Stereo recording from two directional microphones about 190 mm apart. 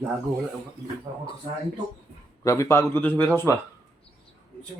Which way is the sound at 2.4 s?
15° left (ahead or behind).